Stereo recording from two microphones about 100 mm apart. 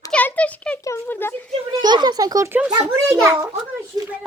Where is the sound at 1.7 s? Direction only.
45° right (ahead or behind).